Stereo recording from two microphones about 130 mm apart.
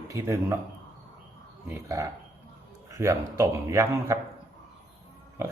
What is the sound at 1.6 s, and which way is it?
Speech, 20° right (ahead or behind).